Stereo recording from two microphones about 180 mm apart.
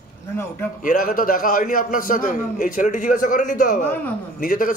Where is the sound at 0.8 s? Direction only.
50° left (ahead or behind).